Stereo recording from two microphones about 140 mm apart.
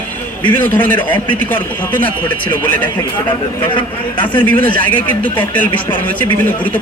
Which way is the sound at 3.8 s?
35° left (ahead or behind).